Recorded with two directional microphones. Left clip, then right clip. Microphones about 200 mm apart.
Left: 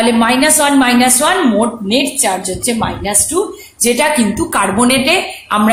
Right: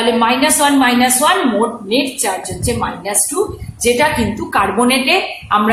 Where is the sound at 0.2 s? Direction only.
55° left (ahead or behind).